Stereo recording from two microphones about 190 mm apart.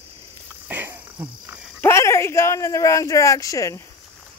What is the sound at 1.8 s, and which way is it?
Speech, 15° left (ahead or behind).